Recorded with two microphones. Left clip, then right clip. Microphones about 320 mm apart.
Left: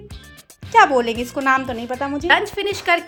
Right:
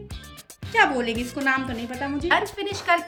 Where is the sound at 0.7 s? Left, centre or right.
Centre.